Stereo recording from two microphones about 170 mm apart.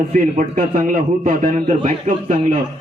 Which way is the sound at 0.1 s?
50° right (ahead or behind).